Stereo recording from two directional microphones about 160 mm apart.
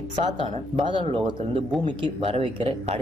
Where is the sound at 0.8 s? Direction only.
35° right (ahead or behind).